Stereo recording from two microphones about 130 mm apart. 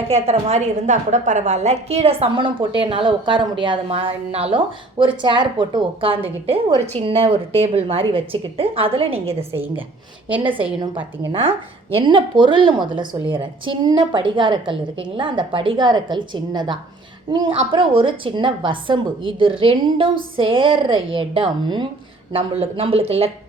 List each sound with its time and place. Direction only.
0.1 s a woman's voice: 55° right (ahead or behind)